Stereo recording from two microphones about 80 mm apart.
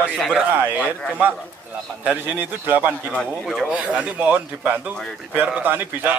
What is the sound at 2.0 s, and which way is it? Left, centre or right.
A man's voice, right.